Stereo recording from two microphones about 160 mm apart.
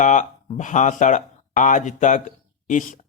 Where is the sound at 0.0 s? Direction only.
50° left (ahead or behind).